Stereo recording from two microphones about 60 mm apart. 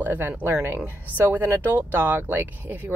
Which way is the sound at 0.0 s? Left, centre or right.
Right.